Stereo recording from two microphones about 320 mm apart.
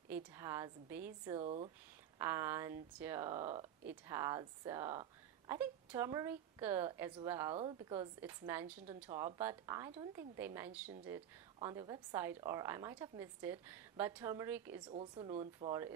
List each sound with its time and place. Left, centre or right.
0.1 s a woman's voice: centre
2.1 s a woman's voice: centre